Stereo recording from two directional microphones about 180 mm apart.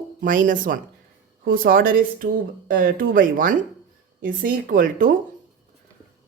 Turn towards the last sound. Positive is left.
turn(degrees=-50)  # may be behind; listen again after turning